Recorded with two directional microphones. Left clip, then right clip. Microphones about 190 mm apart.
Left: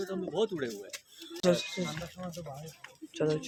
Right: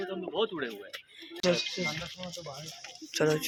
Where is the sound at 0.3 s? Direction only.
85° left.